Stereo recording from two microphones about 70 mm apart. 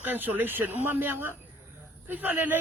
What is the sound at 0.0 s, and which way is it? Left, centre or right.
Speech, right.